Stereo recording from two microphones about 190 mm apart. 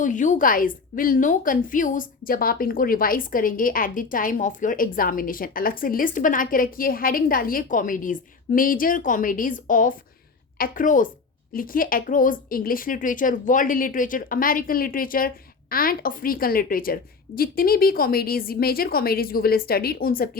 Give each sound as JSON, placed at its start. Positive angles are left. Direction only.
{"t": 0.0, "sound": "a woman's voice", "side_deg": 40}